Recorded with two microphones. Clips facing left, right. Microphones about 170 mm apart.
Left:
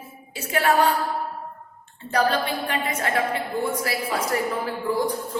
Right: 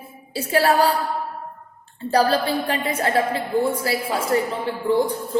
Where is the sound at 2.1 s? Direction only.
35° right (ahead or behind).